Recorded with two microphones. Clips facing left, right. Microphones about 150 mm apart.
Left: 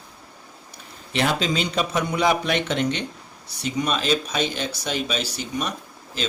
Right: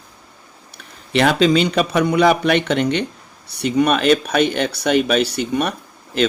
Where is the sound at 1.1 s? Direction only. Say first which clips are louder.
Right 8 dB; 70° right (ahead or behind).